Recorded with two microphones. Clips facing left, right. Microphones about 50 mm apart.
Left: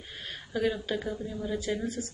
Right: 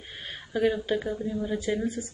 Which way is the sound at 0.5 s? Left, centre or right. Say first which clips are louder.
Right 4 dB; centre.